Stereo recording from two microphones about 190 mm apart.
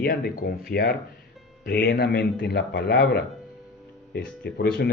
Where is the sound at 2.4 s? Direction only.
65° left (ahead or behind).